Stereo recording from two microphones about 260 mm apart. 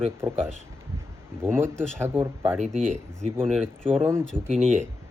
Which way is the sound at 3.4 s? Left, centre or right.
Centre.